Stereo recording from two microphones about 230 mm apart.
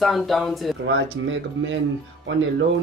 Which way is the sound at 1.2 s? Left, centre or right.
Right.